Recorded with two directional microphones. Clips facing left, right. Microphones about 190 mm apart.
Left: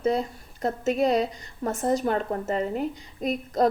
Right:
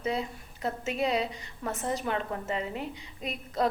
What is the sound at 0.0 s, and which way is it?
A woman's voice, 40° left (ahead or behind).